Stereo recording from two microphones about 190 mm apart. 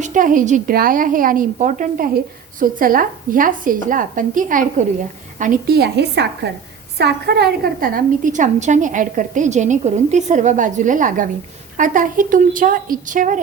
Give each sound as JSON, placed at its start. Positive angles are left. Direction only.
{"t": 0.0, "sound": "a woman's voice", "side_deg": -45}